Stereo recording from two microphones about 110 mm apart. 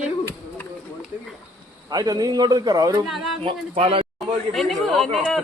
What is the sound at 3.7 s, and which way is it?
Speech, 60° right (ahead or behind).